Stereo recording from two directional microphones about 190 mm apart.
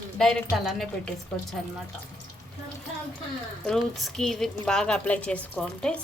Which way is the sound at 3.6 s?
Centre (ahead or behind).